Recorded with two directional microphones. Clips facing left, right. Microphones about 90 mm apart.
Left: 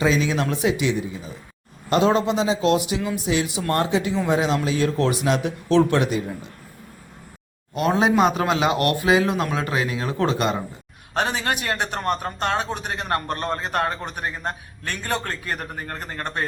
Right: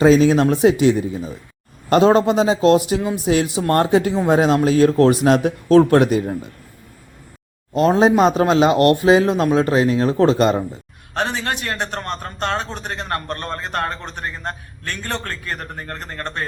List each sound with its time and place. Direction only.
0.0 s a man's voice: 45° right (ahead or behind)
7.7 s speech: 35° right (ahead or behind)
11.1 s a man's voice: 10° left (ahead or behind)